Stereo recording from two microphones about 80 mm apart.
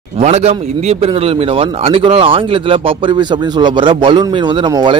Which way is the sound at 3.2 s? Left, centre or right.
Right.